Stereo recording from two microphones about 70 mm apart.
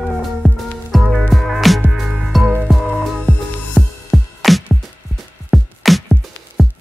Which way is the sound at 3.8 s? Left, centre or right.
Centre.